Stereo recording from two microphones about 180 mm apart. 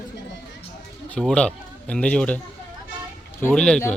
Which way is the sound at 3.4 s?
5° left (ahead or behind).